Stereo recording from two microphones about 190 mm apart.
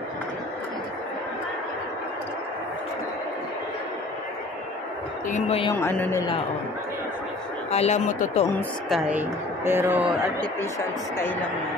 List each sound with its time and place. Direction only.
5.3 s speech: 30° left (ahead or behind)
5.8 s speech: 15° left (ahead or behind)
7.7 s speech: 35° left (ahead or behind)
8.8 s a woman's voice: centre (ahead or behind)